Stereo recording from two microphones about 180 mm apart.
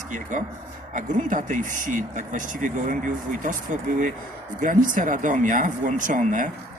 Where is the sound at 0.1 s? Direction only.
45° right (ahead or behind).